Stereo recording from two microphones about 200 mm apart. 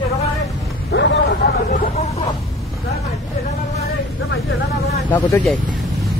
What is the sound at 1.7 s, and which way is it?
Speech, 45° left (ahead or behind).